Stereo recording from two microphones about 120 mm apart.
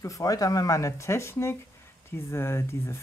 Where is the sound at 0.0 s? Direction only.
30° left (ahead or behind).